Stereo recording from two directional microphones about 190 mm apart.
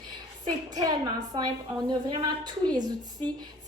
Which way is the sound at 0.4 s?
20° right (ahead or behind).